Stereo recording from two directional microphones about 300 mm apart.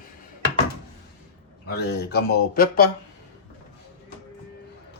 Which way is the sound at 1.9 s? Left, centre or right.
Left.